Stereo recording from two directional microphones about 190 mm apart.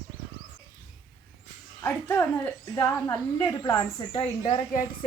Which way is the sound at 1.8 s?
10° left (ahead or behind).